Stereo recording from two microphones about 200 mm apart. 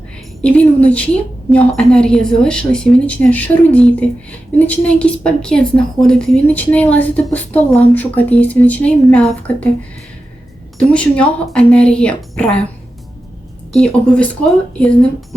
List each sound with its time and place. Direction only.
0.4 s a woman's voice: 5° left (ahead or behind)
10.9 s a woman's voice: 5° left (ahead or behind)
13.7 s a woman's voice: 5° left (ahead or behind)